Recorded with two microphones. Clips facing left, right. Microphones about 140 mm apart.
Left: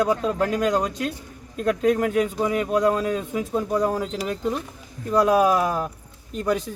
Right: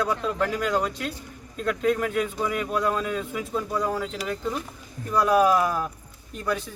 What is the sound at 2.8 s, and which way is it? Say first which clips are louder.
Speech: left 5 dB; 35° left (ahead or behind).